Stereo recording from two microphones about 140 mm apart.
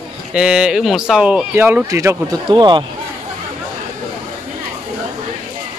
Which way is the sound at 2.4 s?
35° right (ahead or behind).